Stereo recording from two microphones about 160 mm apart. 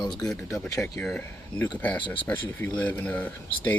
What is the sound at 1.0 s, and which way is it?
Speech, 5° left (ahead or behind).